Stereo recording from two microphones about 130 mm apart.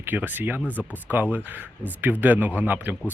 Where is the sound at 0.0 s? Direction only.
15° right (ahead or behind).